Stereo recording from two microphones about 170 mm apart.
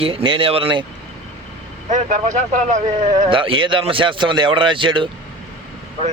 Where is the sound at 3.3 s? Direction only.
30° right (ahead or behind).